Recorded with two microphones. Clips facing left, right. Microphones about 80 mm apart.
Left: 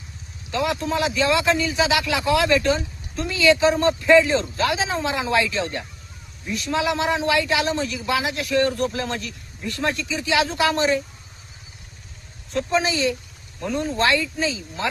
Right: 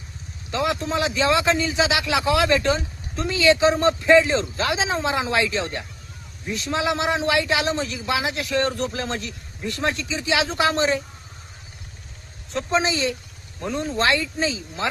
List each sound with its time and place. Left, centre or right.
0.5 s a man's voice: right
12.5 s a man's voice: right